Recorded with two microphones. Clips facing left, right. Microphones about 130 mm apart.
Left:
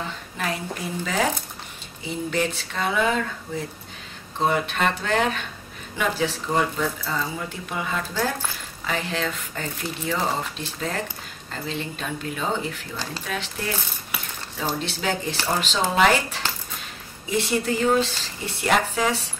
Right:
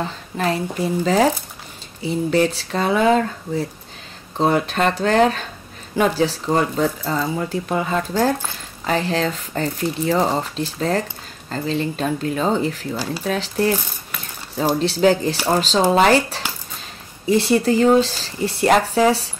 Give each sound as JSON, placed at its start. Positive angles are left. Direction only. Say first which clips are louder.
{"t": 0.0, "sound": "a woman's voice", "louder": "right 7 dB", "side_deg": -35}
{"t": 2.3, "sound": "speech", "louder": "right 7 dB", "side_deg": -35}
{"t": 12.9, "sound": "speech", "louder": "right 7 dB", "side_deg": -10}
{"t": 13.2, "sound": "speech", "louder": "right 13 dB", "side_deg": -35}
{"t": 14.8, "sound": "speech", "louder": "right 11 dB", "side_deg": -35}